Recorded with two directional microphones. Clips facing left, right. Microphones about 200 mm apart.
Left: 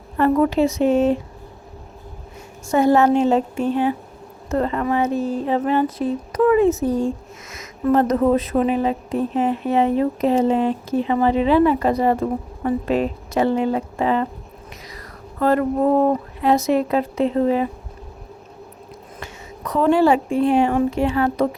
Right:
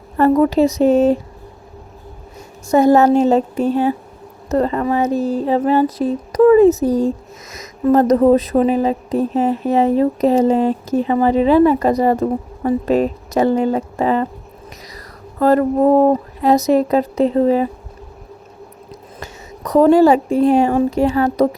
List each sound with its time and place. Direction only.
0.2 s speech: 40° right (ahead or behind)
2.6 s speech: 40° right (ahead or behind)
19.2 s speech: 40° right (ahead or behind)